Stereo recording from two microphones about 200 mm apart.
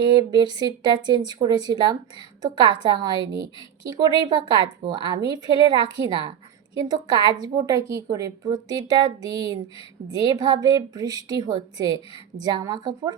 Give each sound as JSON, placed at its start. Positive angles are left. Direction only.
{"t": 0.1, "sound": "a woman's voice", "side_deg": -20}